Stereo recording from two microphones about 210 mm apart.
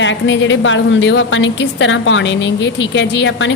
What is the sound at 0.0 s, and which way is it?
A woman's voice, 60° left (ahead or behind).